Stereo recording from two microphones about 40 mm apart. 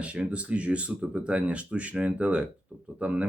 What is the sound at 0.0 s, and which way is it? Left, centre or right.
Speech, right.